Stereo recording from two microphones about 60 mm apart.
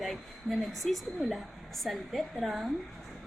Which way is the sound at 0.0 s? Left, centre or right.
Centre.